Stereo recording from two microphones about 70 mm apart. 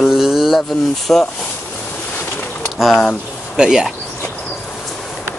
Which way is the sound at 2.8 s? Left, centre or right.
Centre.